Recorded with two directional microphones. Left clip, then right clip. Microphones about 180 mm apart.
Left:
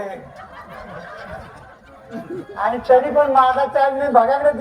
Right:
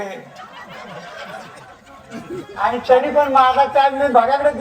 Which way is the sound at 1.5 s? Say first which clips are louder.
Right 2 dB; 45° left (ahead or behind).